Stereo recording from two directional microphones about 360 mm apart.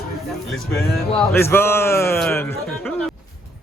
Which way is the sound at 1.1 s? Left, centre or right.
Centre.